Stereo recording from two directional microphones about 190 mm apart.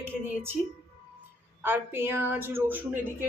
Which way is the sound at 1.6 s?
10° right (ahead or behind).